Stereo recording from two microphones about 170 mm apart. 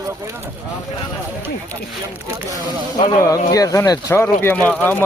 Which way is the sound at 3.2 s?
20° left (ahead or behind).